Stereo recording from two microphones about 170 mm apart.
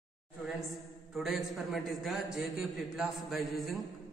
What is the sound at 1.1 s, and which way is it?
A man's voice, centre (ahead or behind).